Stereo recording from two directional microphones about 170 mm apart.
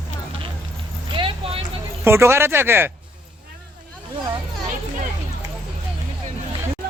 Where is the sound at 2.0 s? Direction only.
15° right (ahead or behind).